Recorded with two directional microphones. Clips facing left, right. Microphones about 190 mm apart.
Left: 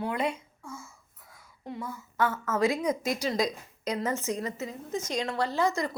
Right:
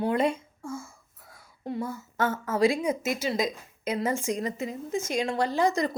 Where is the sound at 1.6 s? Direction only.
35° right (ahead or behind).